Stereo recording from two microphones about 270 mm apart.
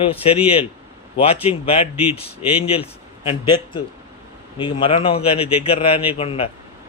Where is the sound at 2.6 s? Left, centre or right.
Left.